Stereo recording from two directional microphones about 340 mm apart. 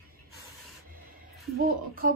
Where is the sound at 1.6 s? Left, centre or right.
Right.